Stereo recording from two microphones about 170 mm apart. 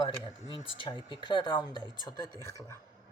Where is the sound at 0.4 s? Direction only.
25° left (ahead or behind).